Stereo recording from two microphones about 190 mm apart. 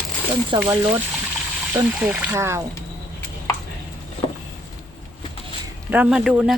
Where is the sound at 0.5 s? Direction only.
25° right (ahead or behind).